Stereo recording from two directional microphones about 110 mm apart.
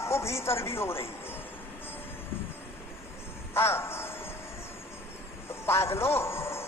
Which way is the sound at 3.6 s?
20° left (ahead or behind).